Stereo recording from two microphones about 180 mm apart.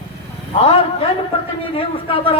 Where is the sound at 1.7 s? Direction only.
30° left (ahead or behind).